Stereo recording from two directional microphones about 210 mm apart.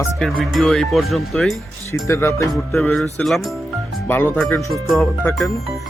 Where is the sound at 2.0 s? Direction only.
15° left (ahead or behind).